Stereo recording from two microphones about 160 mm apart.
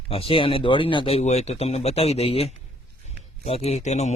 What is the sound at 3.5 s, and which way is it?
Speech, 40° left (ahead or behind).